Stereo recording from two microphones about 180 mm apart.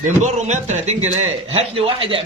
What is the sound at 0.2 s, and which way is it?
A man's voice, 40° right (ahead or behind).